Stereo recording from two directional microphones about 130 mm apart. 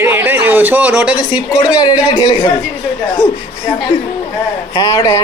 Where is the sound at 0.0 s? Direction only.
15° right (ahead or behind).